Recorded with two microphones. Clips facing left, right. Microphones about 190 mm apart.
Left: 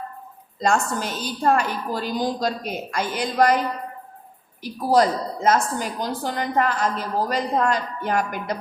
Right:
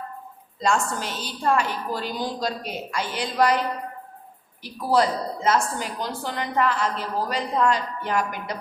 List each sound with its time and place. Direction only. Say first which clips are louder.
0.6 s a woman's voice: left 2 dB; 45° left (ahead or behind)
4.6 s a woman's voice: left 3 dB; 40° left (ahead or behind)